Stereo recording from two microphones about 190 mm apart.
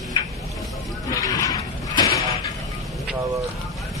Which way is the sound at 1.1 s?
20° left (ahead or behind).